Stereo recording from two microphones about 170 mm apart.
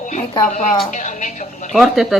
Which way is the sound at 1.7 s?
Centre (ahead or behind).